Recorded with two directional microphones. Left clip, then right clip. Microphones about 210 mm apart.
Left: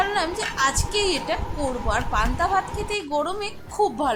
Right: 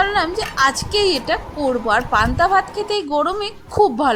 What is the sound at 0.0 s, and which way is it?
A woman's voice, 20° right (ahead or behind).